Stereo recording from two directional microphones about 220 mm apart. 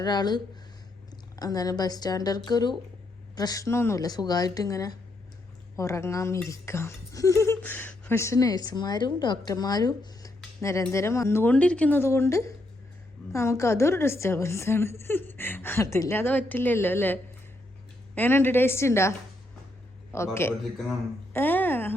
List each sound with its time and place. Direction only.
0.0 s speech: 20° left (ahead or behind)
20.1 s speech: 10° left (ahead or behind)